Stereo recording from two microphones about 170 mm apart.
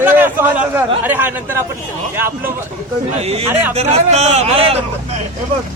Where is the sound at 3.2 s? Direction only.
35° right (ahead or behind).